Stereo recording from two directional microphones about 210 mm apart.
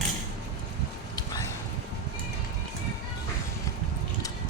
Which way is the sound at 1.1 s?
15° left (ahead or behind).